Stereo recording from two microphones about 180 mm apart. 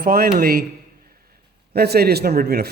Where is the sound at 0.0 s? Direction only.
60° right (ahead or behind).